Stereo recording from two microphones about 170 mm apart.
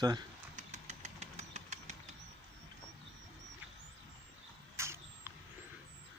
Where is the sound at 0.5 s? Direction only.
45° right (ahead or behind).